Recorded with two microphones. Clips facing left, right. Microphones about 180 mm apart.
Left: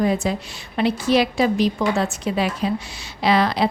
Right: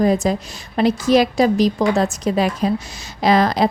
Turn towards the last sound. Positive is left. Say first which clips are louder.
# right 3 dB
turn(degrees=-45)  # may be behind; listen again after turning